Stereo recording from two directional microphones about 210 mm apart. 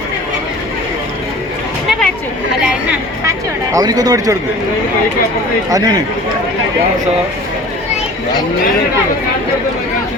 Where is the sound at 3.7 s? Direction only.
20° right (ahead or behind).